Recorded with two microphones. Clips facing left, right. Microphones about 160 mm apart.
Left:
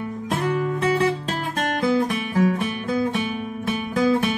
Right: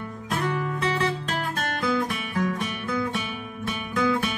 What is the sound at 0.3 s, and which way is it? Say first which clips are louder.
Music: left 4 dB; 30° left (ahead or behind).